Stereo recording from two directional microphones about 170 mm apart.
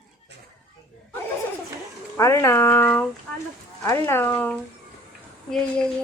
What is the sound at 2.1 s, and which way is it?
A woman's voice, 20° left (ahead or behind).